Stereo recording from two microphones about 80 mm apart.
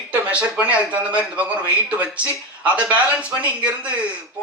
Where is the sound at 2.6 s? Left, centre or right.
Centre.